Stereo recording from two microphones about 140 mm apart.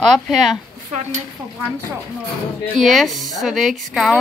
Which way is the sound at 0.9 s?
55° right (ahead or behind).